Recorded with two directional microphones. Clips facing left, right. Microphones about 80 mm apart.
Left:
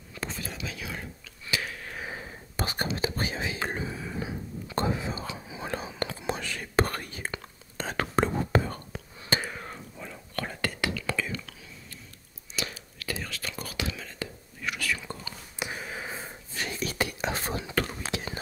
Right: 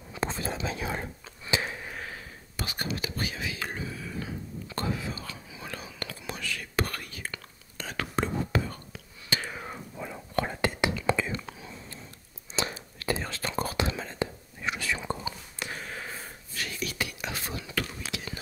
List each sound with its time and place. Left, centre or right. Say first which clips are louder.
0.2 s whispering: right 5 dB; right
1.5 s a sound: right 3 dB; right
2.5 s whispering: left 3 dB; left
9.5 s whispering: right 1 dB; centre; by 15.3 s right
15.6 s whispering: left 2 dB; centre; by 18.4 s left